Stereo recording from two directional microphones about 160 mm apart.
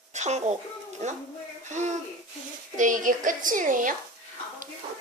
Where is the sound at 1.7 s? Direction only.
45° right (ahead or behind).